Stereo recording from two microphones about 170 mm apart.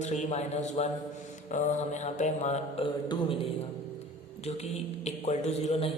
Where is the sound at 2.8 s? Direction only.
30° left (ahead or behind).